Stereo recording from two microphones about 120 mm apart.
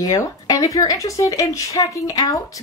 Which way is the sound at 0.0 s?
30° left (ahead or behind).